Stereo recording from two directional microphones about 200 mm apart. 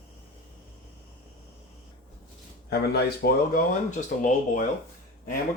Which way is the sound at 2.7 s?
50° left (ahead or behind).